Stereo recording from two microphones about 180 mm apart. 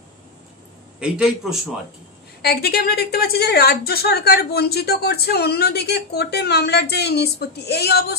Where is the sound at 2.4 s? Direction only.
60° left (ahead or behind).